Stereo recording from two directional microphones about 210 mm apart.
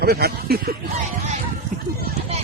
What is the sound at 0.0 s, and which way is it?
Speech, 50° right (ahead or behind).